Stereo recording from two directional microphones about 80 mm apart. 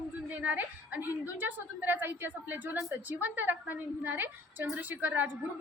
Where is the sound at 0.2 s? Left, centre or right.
Centre.